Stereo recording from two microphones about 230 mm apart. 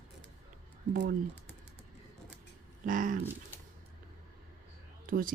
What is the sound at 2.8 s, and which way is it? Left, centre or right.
Speech, right.